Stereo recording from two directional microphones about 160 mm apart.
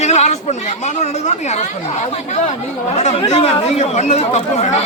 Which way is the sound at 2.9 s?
45° left (ahead or behind).